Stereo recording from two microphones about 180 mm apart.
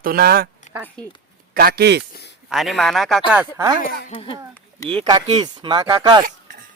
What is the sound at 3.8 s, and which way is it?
Speech, 50° left (ahead or behind).